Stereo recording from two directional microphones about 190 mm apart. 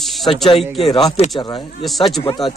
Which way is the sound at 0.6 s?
Centre (ahead or behind).